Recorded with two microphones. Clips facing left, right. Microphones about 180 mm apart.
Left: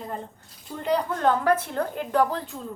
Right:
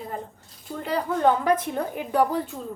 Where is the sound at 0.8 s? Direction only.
5° right (ahead or behind).